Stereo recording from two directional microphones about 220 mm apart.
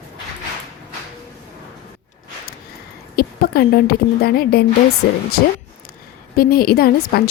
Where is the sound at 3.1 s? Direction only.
45° left (ahead or behind).